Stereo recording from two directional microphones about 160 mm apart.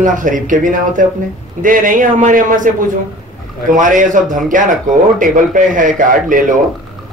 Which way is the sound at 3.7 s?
55° right (ahead or behind).